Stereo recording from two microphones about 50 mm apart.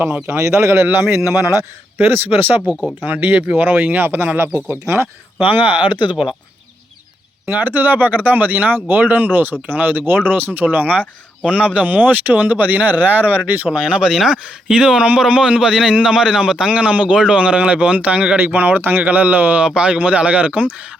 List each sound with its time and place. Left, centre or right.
0.3 s a man's voice: right
0.9 s a man's voice: right
2.0 s speech: right
3.9 s a man's voice: right
5.4 s speech: right
7.4 s speech: right
13.7 s a man's voice: centre
14.1 s a man's voice: centre; by 18.3 s right
18.3 s speech: right
19.6 s a man's voice: centre